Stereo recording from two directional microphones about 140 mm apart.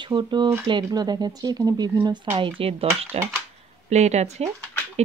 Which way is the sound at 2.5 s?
45° right (ahead or behind).